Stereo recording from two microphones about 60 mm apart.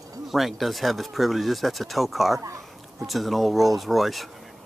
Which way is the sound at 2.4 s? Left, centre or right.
Right.